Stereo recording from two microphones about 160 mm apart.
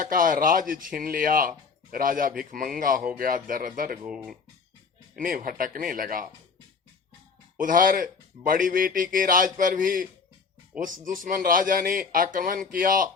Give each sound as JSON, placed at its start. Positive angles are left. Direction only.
{"t": 0.0, "sound": "a man's voice", "side_deg": -60}
{"t": 4.0, "sound": "speech", "side_deg": -5}
{"t": 5.1, "sound": "a man's voice", "side_deg": -60}
{"t": 7.6, "sound": "a man's voice", "side_deg": -60}